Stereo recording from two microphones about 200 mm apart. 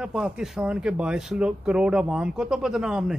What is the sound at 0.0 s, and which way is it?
A man's voice, 5° right (ahead or behind).